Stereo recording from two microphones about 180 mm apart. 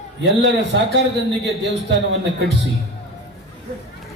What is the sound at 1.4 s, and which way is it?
A man's voice, 80° right.